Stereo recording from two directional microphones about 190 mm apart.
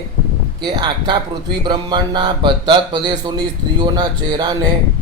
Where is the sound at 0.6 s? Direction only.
20° right (ahead or behind).